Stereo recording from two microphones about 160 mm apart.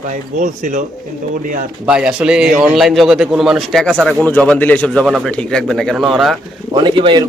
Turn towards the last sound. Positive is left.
turn(degrees=-30)  # may be behind; listen again after turning